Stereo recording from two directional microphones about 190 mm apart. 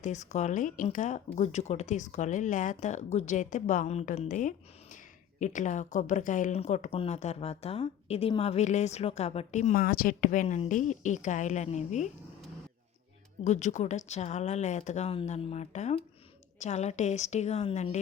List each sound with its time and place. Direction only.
0.0 s a woman's voice: 40° left (ahead or behind)
13.4 s a woman's voice: 40° left (ahead or behind)